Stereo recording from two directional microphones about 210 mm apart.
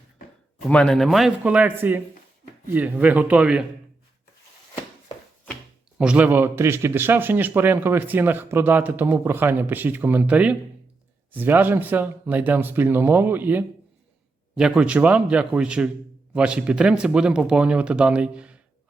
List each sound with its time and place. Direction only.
0.7 s speech: 5° left (ahead or behind)
6.0 s speech: 5° right (ahead or behind)